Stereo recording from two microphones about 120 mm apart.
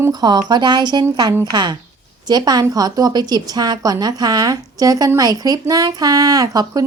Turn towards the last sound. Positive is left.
turn(degrees=-30)  # may be behind; listen again after turning